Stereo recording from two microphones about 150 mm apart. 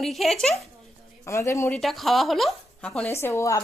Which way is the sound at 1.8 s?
Centre (ahead or behind).